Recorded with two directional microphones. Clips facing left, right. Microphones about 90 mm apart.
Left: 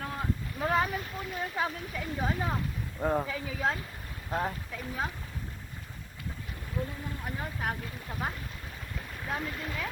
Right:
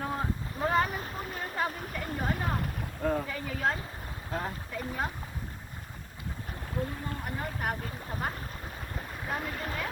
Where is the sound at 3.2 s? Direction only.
5° left (ahead or behind).